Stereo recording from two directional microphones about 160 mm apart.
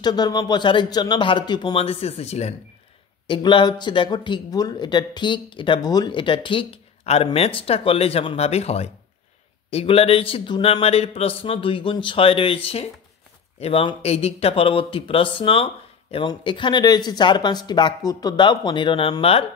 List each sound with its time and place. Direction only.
0.0 s speech: 25° left (ahead or behind); by 2.5 s 40° left (ahead or behind)
3.3 s speech: 30° left (ahead or behind)